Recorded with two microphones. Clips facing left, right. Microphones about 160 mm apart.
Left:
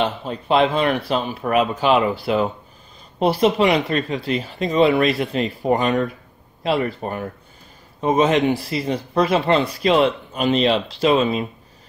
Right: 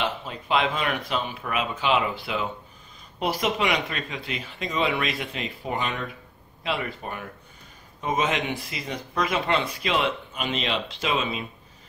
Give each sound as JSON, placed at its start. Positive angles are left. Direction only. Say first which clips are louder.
{"t": 0.0, "sound": "speech", "louder": "left 6 dB", "side_deg": 35}
{"t": 3.2, "sound": "speech", "louder": "left 9 dB", "side_deg": 30}